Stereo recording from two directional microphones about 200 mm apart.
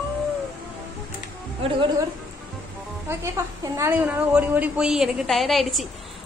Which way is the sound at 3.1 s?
15° right (ahead or behind).